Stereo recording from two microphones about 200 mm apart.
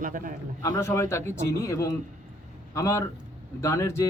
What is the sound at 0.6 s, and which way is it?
Speech, 15° left (ahead or behind).